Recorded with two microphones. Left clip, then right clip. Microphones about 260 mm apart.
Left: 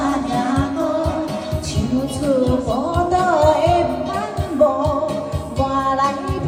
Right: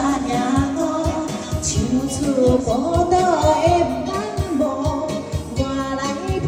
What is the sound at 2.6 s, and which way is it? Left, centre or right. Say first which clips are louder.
Music: right 1 dB; centre.